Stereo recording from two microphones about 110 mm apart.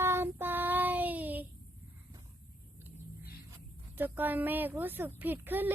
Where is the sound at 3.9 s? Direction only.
15° right (ahead or behind).